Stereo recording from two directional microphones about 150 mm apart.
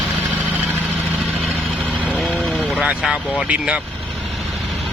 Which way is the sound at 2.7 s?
5° right (ahead or behind).